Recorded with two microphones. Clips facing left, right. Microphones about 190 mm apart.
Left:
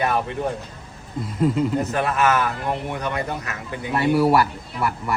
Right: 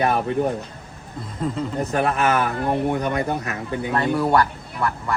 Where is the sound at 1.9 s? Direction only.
35° right (ahead or behind).